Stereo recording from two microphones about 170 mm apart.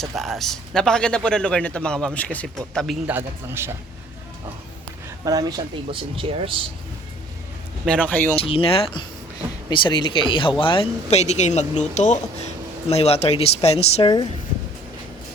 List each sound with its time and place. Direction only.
0.2 s a man's voice: centre (ahead or behind)
3.2 s a man's voice: 15° right (ahead or behind)
5.2 s speech: 20° right (ahead or behind)
7.9 s speech: 10° left (ahead or behind)
8.4 s speech: 35° left (ahead or behind)